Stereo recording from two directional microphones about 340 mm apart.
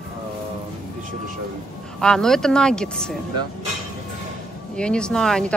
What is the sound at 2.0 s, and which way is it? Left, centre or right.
Speech, centre.